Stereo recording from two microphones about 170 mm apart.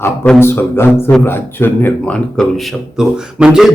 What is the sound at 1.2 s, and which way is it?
Speech, 15° left (ahead or behind).